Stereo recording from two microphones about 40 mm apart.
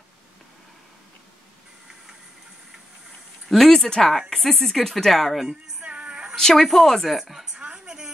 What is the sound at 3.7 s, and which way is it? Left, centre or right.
Speech, centre.